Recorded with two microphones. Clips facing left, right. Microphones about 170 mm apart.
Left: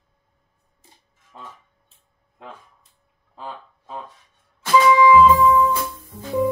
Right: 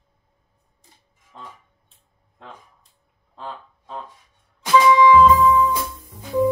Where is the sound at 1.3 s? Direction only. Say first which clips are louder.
Even; 5° left (ahead or behind).